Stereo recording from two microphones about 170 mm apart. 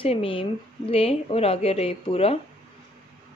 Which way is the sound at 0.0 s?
35° left (ahead or behind).